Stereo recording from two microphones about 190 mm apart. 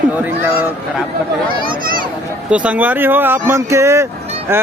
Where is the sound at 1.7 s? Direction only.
50° right (ahead or behind).